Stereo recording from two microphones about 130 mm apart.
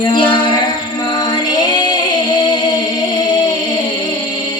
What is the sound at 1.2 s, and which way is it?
Music, 30° left (ahead or behind).